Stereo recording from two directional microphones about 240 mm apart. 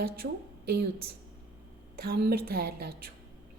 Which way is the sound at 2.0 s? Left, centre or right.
Right.